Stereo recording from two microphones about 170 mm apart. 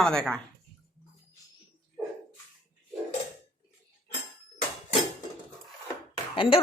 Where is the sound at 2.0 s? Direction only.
5° right (ahead or behind).